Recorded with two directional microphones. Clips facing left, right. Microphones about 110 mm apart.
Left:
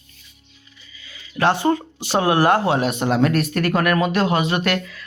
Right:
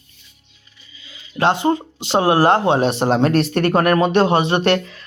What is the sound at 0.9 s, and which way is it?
Speech, 25° right (ahead or behind).